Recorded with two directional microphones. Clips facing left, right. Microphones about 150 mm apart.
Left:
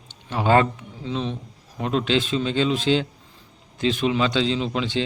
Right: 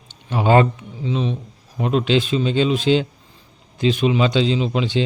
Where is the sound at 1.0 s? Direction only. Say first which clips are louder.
Right 4 dB; 5° right (ahead or behind).